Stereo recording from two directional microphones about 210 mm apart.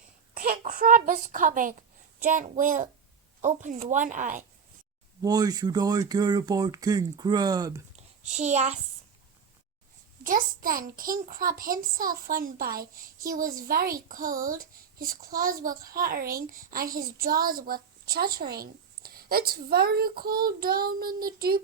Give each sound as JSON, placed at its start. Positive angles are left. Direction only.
{"t": 0.3, "sound": "a sound", "side_deg": -40}
{"t": 2.1, "sound": "a child's voice", "side_deg": -40}
{"t": 5.2, "sound": "speech", "side_deg": -20}
{"t": 8.3, "sound": "a child's voice", "side_deg": -35}
{"t": 10.2, "sound": "a child's voice", "side_deg": -40}